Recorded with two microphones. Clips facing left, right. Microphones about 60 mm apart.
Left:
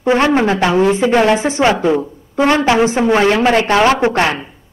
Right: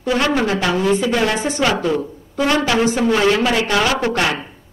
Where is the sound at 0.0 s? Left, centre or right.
Left.